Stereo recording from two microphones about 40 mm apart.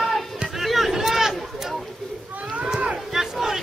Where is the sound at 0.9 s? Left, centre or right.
Centre.